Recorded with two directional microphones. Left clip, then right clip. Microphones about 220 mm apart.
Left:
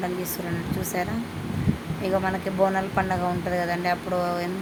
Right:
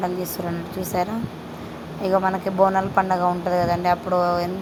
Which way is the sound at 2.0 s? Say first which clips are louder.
Right 5 dB; 5° right (ahead or behind).